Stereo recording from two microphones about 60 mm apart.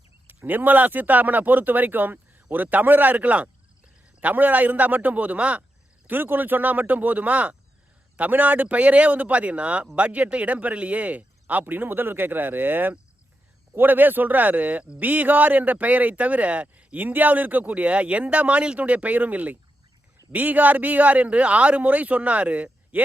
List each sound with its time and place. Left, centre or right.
0.4 s speech: right
6.1 s speech: right